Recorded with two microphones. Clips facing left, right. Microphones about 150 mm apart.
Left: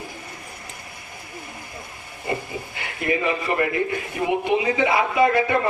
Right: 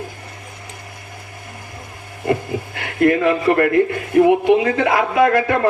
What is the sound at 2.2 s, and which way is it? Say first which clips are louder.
A man's voice: right 8 dB; 65° right (ahead or behind).